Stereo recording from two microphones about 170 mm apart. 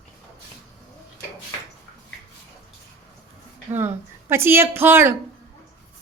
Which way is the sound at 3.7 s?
15° right (ahead or behind).